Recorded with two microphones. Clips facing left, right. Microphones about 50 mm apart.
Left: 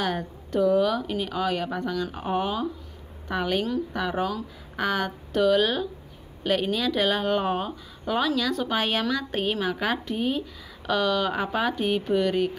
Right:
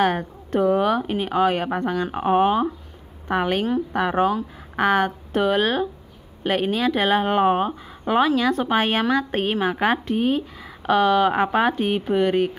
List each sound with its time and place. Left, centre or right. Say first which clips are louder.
0.0 s a woman's voice: right 7 dB; right